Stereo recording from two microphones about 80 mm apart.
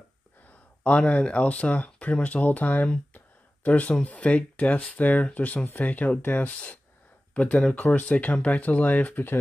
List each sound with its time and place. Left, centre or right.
0.5 s speech: centre